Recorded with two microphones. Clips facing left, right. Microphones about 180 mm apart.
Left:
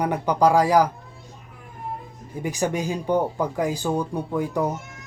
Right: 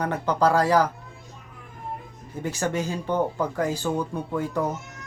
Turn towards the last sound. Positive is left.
turn(degrees=15)  # may be behind; listen again after turning